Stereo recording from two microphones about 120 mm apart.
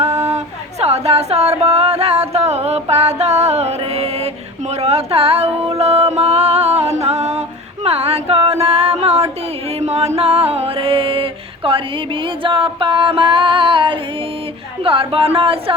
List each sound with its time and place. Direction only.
0.3 s a sound: 65° right (ahead or behind)
4.7 s music: 65° right (ahead or behind); by 14.0 s 45° right (ahead or behind)
14.8 s speech: 50° right (ahead or behind)